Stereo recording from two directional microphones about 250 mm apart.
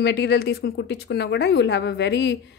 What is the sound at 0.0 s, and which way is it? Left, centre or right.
A woman's voice, left.